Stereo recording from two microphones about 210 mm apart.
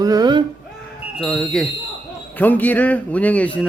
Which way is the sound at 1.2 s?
Centre (ahead or behind).